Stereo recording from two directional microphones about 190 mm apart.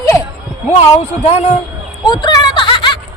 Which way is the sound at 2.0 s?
20° left (ahead or behind).